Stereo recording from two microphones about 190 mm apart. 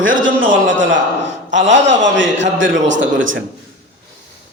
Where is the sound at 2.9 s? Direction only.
90° right.